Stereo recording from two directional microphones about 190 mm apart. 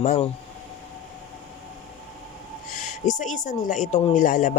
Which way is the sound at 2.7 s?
40° left (ahead or behind).